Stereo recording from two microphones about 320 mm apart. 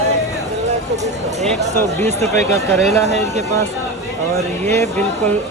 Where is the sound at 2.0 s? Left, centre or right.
Right.